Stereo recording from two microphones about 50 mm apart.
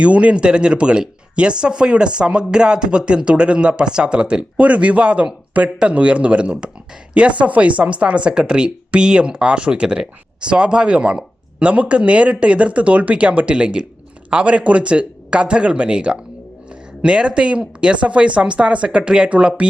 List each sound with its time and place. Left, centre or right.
0.0 s speech: right